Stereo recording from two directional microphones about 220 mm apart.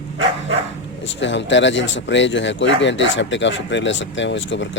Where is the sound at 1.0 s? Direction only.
55° left (ahead or behind).